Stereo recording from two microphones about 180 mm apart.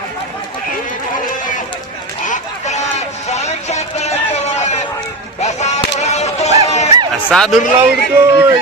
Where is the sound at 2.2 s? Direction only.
40° left (ahead or behind).